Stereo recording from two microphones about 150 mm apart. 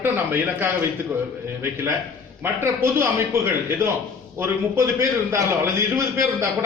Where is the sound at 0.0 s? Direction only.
15° right (ahead or behind).